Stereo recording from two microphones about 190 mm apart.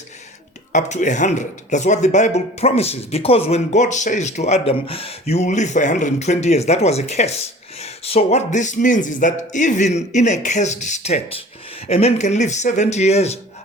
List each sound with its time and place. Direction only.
0.7 s speech: 40° left (ahead or behind)